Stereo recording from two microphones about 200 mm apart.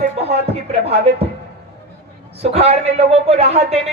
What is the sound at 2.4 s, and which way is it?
A woman's voice, 30° right (ahead or behind).